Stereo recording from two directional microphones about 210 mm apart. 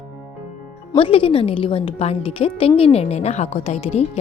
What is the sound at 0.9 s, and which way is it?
A woman's voice, 25° left (ahead or behind).